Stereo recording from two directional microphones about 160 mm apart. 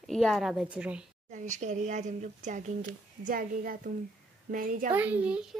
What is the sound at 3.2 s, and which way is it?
A child's voice, 60° right (ahead or behind).